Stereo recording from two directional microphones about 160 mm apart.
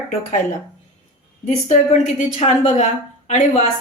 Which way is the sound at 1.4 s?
45° left (ahead or behind).